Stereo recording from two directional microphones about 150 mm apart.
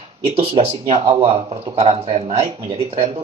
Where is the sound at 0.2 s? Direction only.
40° right (ahead or behind).